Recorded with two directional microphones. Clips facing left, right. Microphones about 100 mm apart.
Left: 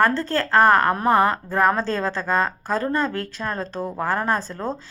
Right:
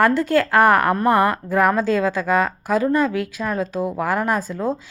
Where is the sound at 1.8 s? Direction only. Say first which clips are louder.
Right 5 dB; 10° right (ahead or behind).